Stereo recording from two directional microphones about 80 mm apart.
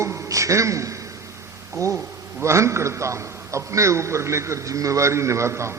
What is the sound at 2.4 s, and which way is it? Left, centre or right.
A man's voice, right.